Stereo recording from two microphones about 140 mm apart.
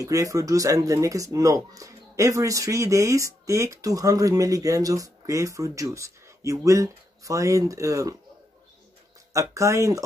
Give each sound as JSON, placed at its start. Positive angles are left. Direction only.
{"t": 0.0, "sound": "speech", "side_deg": -25}
{"t": 9.3, "sound": "speech", "side_deg": -20}